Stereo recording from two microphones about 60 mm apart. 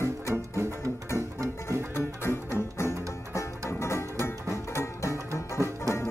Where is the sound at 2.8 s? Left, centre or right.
Left.